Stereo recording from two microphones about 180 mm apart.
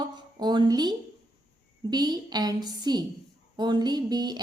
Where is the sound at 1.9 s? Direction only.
20° right (ahead or behind).